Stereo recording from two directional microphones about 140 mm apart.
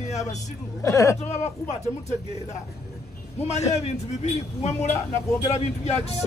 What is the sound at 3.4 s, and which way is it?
Speech, 50° left (ahead or behind).